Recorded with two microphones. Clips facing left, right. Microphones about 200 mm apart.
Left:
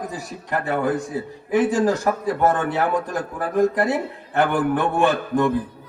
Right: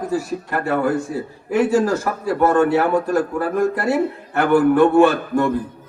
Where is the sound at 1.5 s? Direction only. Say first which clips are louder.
Right 2 dB; 15° left (ahead or behind).